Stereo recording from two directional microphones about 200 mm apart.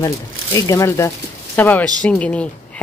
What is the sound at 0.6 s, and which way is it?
A woman's voice, 15° left (ahead or behind).